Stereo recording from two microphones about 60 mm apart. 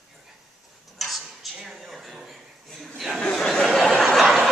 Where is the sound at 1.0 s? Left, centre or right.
Centre.